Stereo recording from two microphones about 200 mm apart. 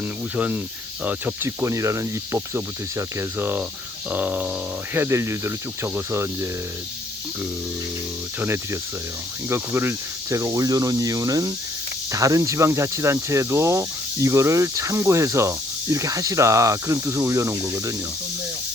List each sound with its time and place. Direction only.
0.3 s speech: 10° right (ahead or behind)
8.4 s speech: 10° right (ahead or behind)